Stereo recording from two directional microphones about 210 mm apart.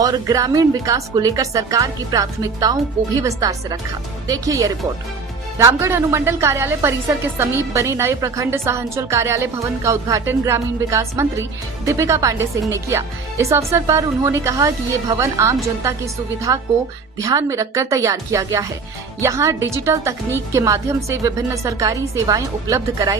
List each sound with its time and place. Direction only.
0.0 s a woman's voice: 15° right (ahead or behind)